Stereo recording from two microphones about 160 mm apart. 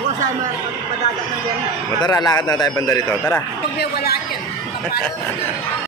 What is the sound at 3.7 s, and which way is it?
Speech, 75° left (ahead or behind).